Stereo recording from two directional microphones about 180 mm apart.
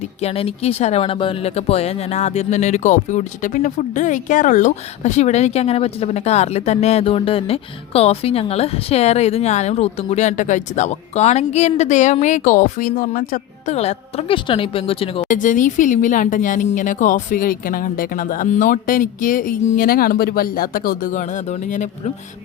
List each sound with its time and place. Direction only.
0.2 s speech: 35° left (ahead or behind)
15.3 s speech: 45° left (ahead or behind)